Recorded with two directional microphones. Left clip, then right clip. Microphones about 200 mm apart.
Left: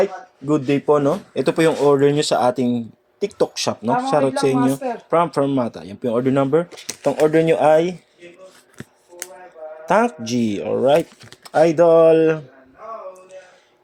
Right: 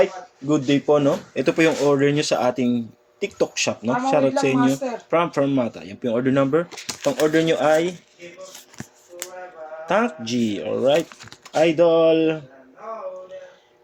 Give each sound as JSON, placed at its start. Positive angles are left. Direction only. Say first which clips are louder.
{"t": 0.0, "sound": "speech", "louder": "even", "side_deg": 25}
{"t": 9.8, "sound": "speech", "louder": "left 4 dB", "side_deg": 25}